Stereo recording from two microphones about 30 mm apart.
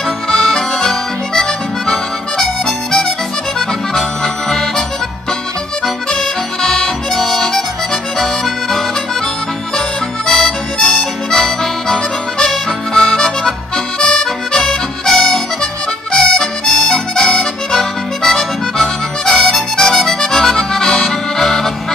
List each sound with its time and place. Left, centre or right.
0.4 s accordion: centre
1.9 s music: centre
3.5 s accordion: centre
6.1 s music: left
7.2 s music: centre
9.8 s harmonica: centre
15.0 s music: centre
19.9 s accordion: centre
20.7 s music: centre